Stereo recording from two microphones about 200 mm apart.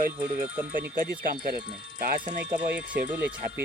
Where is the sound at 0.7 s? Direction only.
45° right (ahead or behind).